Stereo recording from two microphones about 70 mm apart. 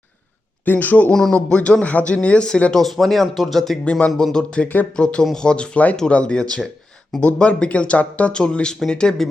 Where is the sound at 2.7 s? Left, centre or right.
Centre.